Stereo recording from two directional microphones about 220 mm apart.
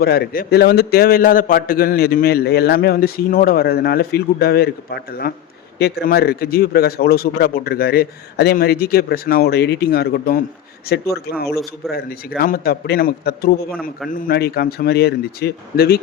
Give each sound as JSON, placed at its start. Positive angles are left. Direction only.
{"t": 0.0, "sound": "a man's voice", "side_deg": 45}
{"t": 11.8, "sound": "a man's voice", "side_deg": 0}
{"t": 12.4, "sound": "a man's voice", "side_deg": 45}